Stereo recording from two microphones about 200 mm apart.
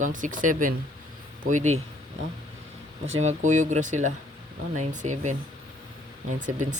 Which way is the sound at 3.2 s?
35° right (ahead or behind).